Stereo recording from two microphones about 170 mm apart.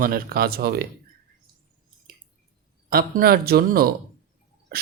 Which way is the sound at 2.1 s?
60° right (ahead or behind).